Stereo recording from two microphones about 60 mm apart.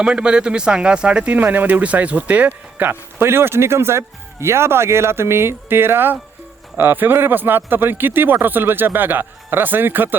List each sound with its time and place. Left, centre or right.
0.0 s speech: centre; by 10.2 s right